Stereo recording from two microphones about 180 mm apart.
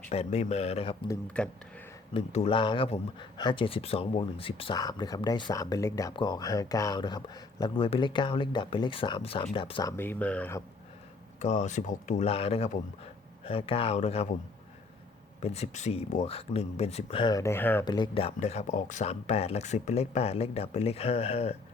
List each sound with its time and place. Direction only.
0.1 s speech: 35° left (ahead or behind)
1.4 s speech: 5° left (ahead or behind)
2.1 s speech: 30° left (ahead or behind)
4.8 s speech: 20° left (ahead or behind)
10.0 s speech: 10° left (ahead or behind)
11.3 s speech: 40° left (ahead or behind)
15.4 s speech: 35° left (ahead or behind); by 17.8 s 10° left (ahead or behind)
17.8 s speech: 25° left (ahead or behind)